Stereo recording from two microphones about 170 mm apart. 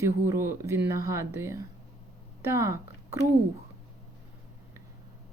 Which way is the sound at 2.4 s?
15° right (ahead or behind).